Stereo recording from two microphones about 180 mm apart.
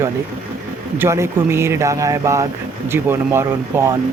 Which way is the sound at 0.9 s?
15° right (ahead or behind).